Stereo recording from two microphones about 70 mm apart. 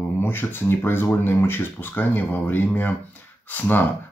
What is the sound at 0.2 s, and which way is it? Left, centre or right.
Speech, left.